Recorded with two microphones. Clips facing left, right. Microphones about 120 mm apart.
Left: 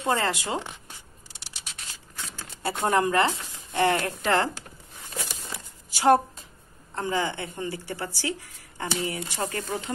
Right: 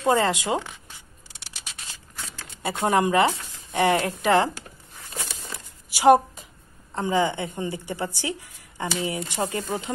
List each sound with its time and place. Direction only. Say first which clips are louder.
0.0 s speech: right 5 dB; 20° right (ahead or behind)
2.6 s speech: right 2 dB; 15° right (ahead or behind)
5.9 s a sound: right 4 dB; 15° right (ahead or behind)
7.0 s speech: right 4 dB; 20° right (ahead or behind)